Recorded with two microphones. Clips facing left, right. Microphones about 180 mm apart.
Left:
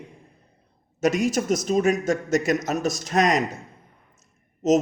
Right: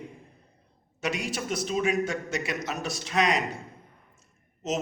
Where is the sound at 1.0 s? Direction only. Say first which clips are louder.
Left 9 dB; 45° left (ahead or behind).